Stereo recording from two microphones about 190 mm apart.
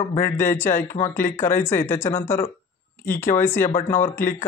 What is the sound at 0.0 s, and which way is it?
Speech, 40° left (ahead or behind).